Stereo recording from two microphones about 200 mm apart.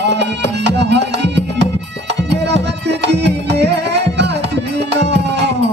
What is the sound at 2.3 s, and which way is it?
Music, 60° right (ahead or behind).